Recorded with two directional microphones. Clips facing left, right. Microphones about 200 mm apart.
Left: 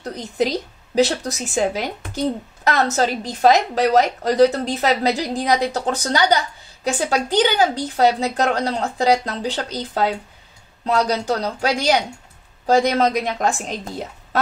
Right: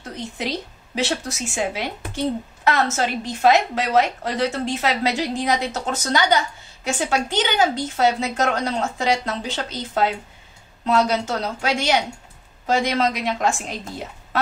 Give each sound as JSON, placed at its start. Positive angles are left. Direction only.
{"t": 0.0, "sound": "a woman's voice", "side_deg": 40}